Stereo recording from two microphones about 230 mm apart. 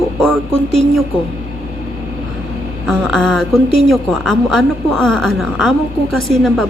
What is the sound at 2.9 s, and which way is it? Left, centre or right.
A woman's voice, centre.